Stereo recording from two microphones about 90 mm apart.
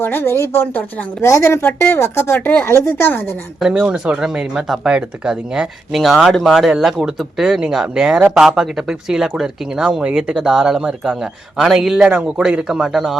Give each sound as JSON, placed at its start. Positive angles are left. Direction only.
{"t": 0.0, "sound": "a woman's voice", "side_deg": 25}
{"t": 3.6, "sound": "speech", "side_deg": -10}